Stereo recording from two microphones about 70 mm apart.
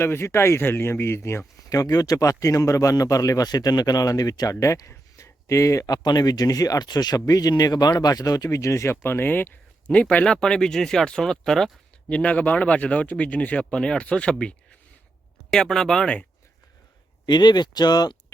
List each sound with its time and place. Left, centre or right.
0.0 s speech: left
1.7 s speech: left
4.6 s speech: left
9.0 s speech: left; by 11.7 s centre
12.0 s speech: centre
17.2 s speech: left